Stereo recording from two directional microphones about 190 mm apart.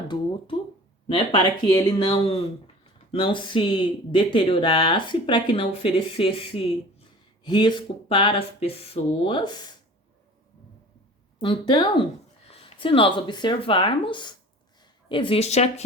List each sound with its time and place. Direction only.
1.0 s speech: 25° left (ahead or behind)
11.3 s speech: 25° left (ahead or behind)